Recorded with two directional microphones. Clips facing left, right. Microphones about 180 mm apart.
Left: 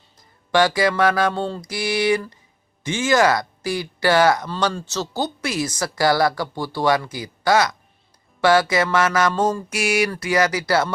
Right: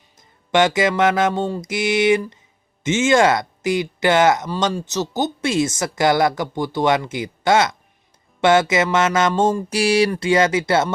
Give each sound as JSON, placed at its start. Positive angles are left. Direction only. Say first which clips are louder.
{"t": 0.5, "sound": "speech", "louder": "right 1 dB", "side_deg": -20}